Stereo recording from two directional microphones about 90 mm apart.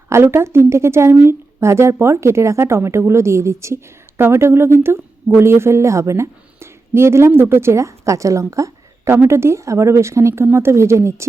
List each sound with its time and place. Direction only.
0.1 s a woman's voice: 30° right (ahead or behind)